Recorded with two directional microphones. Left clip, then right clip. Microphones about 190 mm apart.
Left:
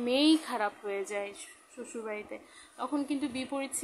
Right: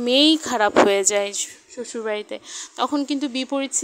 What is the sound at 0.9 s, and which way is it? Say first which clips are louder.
Speech: right 15 dB; 50° right (ahead or behind).